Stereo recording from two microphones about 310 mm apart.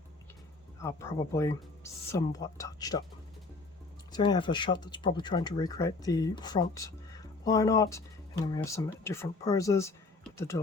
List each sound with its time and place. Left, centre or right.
0.8 s speech: centre
4.1 s speech: centre